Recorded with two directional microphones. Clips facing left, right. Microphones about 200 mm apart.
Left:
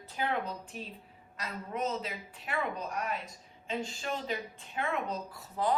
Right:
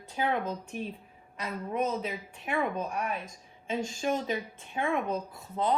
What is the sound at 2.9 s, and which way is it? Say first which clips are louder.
Speech: right 2 dB; 15° right (ahead or behind).